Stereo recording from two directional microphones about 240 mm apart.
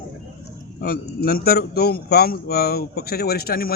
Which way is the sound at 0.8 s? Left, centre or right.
Left.